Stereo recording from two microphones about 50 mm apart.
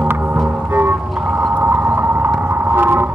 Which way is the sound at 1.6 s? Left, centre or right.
Right.